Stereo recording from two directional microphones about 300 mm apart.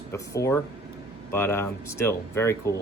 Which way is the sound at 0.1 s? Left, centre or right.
Centre.